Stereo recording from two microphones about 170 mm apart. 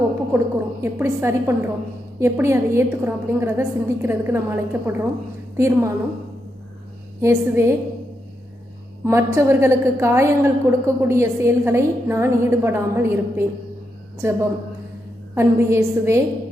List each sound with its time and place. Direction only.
0.3 s a woman's voice: 15° right (ahead or behind)
7.2 s a woman's voice: 15° right (ahead or behind)
9.0 s a woman's voice: 15° right (ahead or behind)